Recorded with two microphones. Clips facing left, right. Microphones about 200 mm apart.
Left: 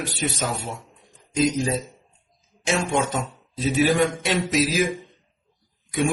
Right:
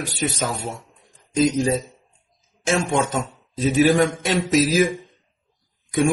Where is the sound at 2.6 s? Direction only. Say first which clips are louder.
Right 2 dB; 50° right (ahead or behind).